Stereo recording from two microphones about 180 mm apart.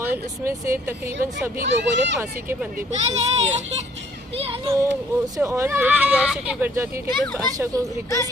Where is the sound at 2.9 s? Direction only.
40° right (ahead or behind).